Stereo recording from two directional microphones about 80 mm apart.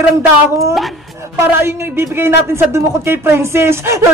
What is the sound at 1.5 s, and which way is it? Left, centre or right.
Speech, right.